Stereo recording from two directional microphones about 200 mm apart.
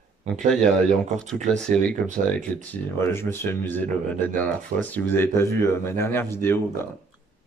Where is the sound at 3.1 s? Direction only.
10° left (ahead or behind).